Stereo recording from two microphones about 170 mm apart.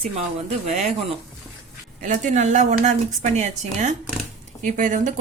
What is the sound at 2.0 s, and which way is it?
A woman's voice, 45° right (ahead or behind).